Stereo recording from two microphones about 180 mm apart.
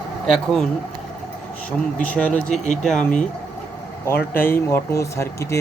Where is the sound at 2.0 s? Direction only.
5° left (ahead or behind).